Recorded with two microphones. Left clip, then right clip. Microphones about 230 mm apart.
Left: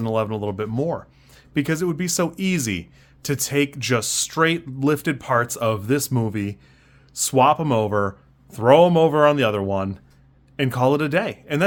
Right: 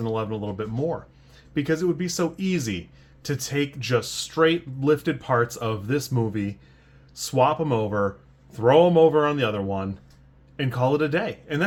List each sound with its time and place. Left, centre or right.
0.0 s speech: left